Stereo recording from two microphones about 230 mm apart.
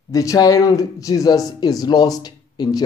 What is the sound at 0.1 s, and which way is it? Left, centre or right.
Speech, centre.